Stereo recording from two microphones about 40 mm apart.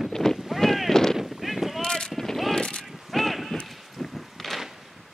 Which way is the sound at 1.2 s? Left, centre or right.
Centre.